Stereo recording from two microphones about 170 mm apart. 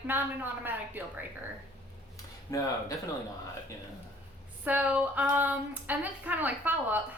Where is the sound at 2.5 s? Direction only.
20° left (ahead or behind).